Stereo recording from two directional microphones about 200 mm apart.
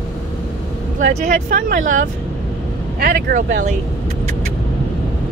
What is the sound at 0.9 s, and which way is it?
Speech, 40° right (ahead or behind).